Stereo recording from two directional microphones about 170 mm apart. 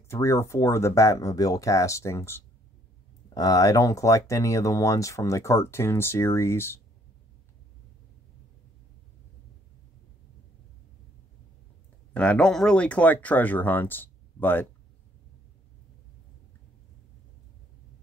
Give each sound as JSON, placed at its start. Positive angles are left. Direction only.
{"t": 0.1, "sound": "speech", "side_deg": 15}
{"t": 12.1, "sound": "speech", "side_deg": 5}